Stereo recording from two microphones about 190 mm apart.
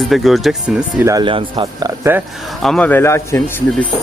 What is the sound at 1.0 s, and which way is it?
Speech, 20° right (ahead or behind).